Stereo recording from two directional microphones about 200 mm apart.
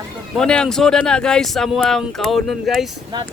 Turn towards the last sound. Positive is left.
turn(degrees=-20)  # may be behind; listen again after turning